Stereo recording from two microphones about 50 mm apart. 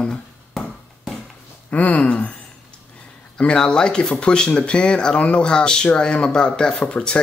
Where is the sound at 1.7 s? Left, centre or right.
Left.